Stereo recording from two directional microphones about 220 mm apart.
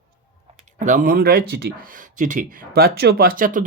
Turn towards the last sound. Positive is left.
turn(degrees=-40)  # may be behind; listen again after turning